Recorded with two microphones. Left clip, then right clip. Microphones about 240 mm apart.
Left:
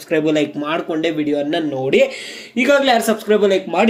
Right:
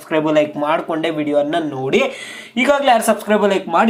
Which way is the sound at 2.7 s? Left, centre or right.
Centre.